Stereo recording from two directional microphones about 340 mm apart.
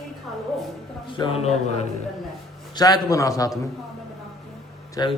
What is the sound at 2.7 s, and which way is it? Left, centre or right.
Speech, centre.